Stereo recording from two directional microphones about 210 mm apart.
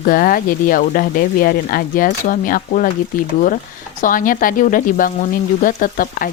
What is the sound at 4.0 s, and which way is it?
Speech, 40° left (ahead or behind).